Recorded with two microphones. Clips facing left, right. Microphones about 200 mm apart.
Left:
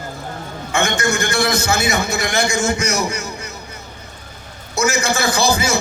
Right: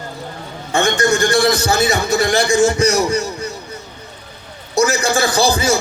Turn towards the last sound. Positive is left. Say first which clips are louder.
# right 2 dB
turn(degrees=-35)  # may be behind; listen again after turning